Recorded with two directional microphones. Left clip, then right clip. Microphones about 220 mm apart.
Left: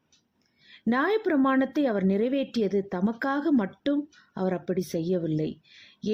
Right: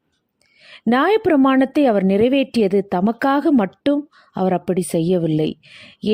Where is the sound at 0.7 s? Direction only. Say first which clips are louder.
Right 9 dB; 35° right (ahead or behind).